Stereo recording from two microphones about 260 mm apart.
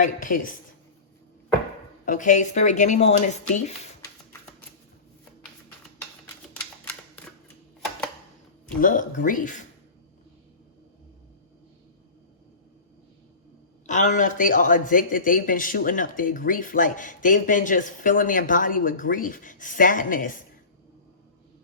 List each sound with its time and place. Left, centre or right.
0.0 s speech: left
2.0 s speech: left
8.8 s speech: left
13.8 s speech: left